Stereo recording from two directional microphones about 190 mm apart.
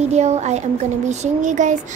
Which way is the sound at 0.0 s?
35° right (ahead or behind).